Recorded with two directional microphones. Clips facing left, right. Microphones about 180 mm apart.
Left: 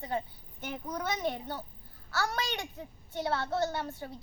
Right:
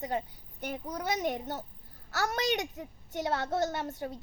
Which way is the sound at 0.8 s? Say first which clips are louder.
Right 1 dB; 10° right (ahead or behind).